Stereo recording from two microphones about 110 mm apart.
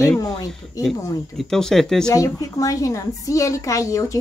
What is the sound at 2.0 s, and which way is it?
A woman's voice, 30° left (ahead or behind).